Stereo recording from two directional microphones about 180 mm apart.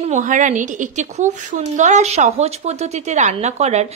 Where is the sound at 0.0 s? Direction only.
45° right (ahead or behind).